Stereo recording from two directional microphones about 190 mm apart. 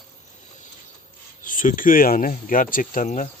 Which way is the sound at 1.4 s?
45° left (ahead or behind).